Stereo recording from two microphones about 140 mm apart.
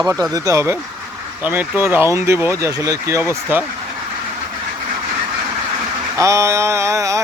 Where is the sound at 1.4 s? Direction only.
10° right (ahead or behind).